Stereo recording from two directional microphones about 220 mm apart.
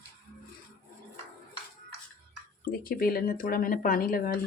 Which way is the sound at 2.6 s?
40° left (ahead or behind).